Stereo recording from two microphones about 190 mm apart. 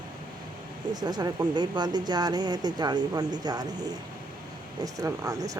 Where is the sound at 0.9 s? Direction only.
20° right (ahead or behind).